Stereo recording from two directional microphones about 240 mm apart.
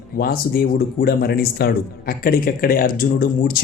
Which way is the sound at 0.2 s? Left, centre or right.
Left.